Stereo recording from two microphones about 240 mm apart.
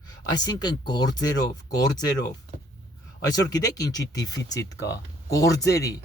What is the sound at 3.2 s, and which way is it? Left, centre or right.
Speech, centre.